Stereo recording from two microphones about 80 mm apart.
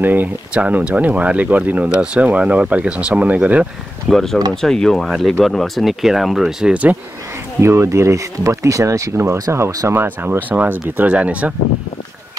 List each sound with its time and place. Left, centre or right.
0.0 s speech: right
4.1 s speech: centre
6.7 s speech: centre
7.6 s speech: right; by 11.5 s centre